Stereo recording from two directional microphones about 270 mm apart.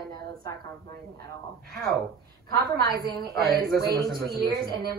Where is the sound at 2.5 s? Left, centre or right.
Right.